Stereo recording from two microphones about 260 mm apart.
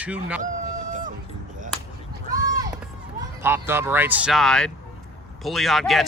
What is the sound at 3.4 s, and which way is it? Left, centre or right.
Speech, centre.